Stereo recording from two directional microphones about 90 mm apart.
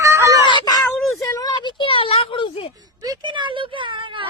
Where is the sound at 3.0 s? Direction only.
45° right (ahead or behind).